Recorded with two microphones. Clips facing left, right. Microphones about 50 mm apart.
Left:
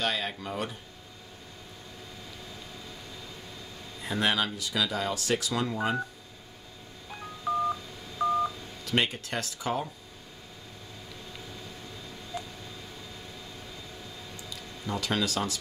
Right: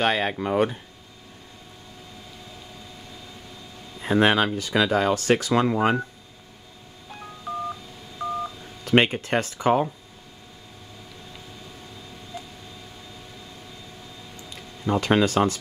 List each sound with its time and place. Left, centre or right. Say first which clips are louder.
0.0 s speech: right 8 dB; right
4.0 s speech: right 8 dB; right
7.4 s telephone dialing: left 3 dB; centre
8.8 s speech: right 9 dB; right
12.3 s vehicle: left 1 dB; centre
14.5 s speech: right 10 dB; right